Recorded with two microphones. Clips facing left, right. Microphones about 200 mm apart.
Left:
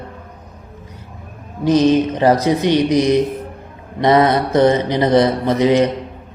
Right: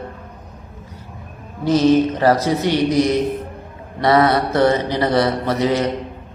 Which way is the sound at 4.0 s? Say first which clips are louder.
Left 2 dB; 20° left (ahead or behind).